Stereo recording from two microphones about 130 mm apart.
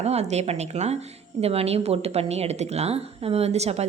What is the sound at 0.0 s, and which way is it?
A woman's voice, 55° right (ahead or behind).